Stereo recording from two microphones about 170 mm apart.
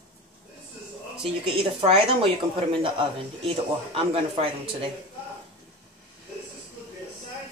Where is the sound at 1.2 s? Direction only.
30° right (ahead or behind).